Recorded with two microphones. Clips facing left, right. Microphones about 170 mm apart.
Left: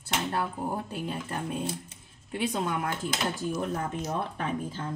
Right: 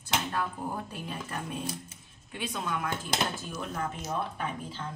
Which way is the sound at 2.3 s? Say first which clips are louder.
Left 6 dB; 35° left (ahead or behind).